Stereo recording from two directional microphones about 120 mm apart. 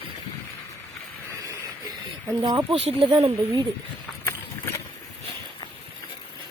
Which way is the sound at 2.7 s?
50° right (ahead or behind).